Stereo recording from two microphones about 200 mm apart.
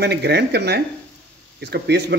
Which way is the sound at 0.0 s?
55° right (ahead or behind).